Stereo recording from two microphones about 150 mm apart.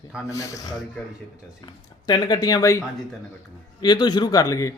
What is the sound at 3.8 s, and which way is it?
Speech, 30° left (ahead or behind).